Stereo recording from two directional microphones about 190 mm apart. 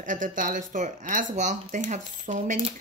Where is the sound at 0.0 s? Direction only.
45° right (ahead or behind).